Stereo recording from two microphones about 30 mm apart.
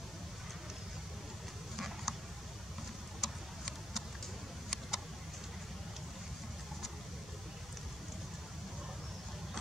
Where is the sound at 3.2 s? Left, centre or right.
Centre.